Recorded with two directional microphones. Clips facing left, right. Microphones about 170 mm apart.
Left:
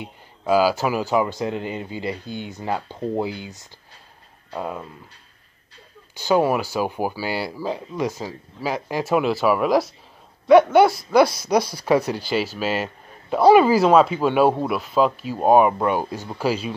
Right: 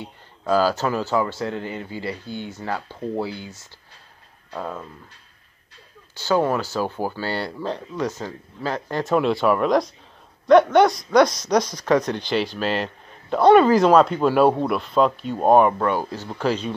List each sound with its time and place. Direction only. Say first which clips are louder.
0.0 s speech: left 2 dB; 10° left (ahead or behind)
6.1 s speech: left 2 dB; 15° left (ahead or behind)